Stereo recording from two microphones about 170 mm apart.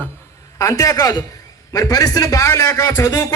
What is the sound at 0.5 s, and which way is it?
A man's voice, 20° left (ahead or behind).